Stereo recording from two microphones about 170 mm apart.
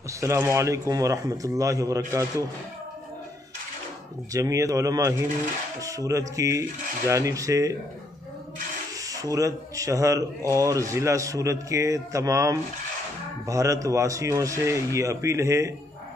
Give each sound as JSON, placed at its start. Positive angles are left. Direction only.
{"t": 0.2, "sound": "speech", "side_deg": -15}
{"t": 4.3, "sound": "speech", "side_deg": -20}
{"t": 8.9, "sound": "speech", "side_deg": -20}